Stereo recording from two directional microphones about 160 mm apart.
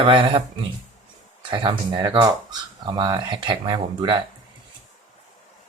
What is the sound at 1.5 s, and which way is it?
Speech, 30° right (ahead or behind).